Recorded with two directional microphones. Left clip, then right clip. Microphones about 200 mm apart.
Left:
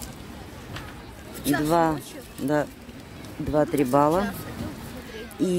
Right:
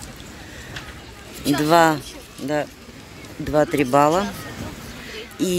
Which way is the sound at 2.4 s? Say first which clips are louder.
Right 1 dB; 15° left (ahead or behind).